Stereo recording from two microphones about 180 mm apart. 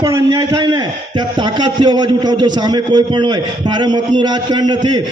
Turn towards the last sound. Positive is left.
turn(degrees=-25)  # may be behind; listen again after turning